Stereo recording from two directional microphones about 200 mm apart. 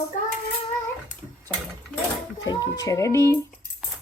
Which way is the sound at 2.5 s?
20° left (ahead or behind).